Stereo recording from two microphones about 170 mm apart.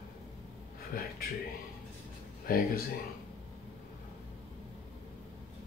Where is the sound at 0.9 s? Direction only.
60° left (ahead or behind).